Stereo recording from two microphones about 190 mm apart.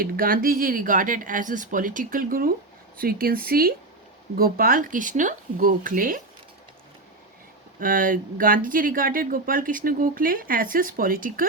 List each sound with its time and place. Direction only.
0.0 s speech: 50° right (ahead or behind)
7.8 s speech: 45° right (ahead or behind)